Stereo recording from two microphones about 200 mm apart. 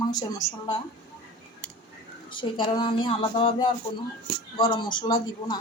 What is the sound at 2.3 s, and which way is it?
Speech, 25° left (ahead or behind).